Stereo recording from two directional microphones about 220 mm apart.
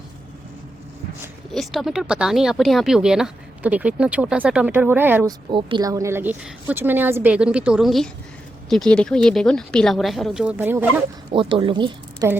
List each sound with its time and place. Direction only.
1.5 s speech: centre (ahead or behind)
5.5 s a woman's voice: 20° right (ahead or behind)
11.3 s a woman's voice: 25° right (ahead or behind)